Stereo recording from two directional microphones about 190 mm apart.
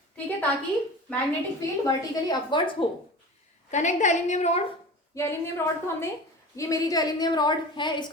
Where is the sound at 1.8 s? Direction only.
25° left (ahead or behind).